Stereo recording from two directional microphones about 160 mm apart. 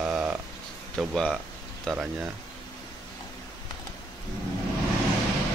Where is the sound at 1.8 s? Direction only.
5° right (ahead or behind).